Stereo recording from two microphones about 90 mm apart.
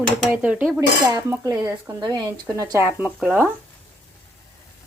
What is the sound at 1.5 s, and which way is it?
Speech, 35° right (ahead or behind).